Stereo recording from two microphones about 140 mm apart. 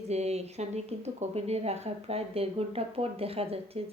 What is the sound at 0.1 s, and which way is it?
Speech, 50° right (ahead or behind).